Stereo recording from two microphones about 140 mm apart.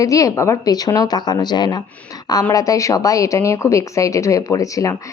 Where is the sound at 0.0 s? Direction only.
25° left (ahead or behind).